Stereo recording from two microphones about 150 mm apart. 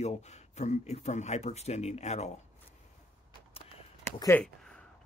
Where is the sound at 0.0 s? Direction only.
50° left (ahead or behind).